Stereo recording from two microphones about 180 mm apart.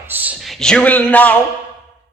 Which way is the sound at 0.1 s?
10° right (ahead or behind).